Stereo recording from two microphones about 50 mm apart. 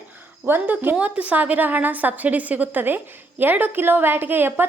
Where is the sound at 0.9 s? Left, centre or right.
Right.